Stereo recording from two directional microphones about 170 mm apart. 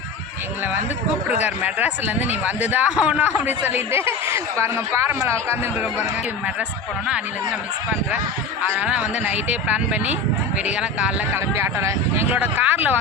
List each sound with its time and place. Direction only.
1.5 s speech: 10° right (ahead or behind)
8.6 s speech: 10° right (ahead or behind)